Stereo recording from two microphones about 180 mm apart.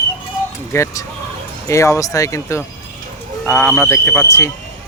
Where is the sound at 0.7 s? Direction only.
15° left (ahead or behind).